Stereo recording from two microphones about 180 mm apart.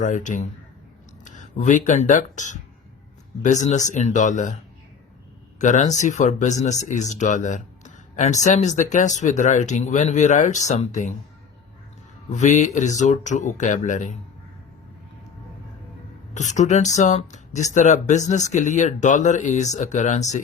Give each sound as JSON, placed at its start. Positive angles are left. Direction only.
{"t": 0.0, "sound": "speech", "side_deg": 45}
{"t": 5.5, "sound": "speech", "side_deg": 40}
{"t": 12.3, "sound": "speech", "side_deg": 40}
{"t": 16.3, "sound": "speech", "side_deg": 40}